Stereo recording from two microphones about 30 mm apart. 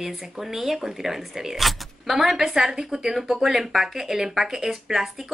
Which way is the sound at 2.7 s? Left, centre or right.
Right.